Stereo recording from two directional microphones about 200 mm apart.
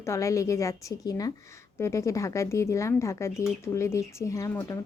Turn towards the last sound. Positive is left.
turn(degrees=15)  # may be behind; listen again after turning